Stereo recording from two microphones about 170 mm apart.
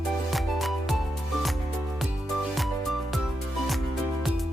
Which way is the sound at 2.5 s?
Centre (ahead or behind).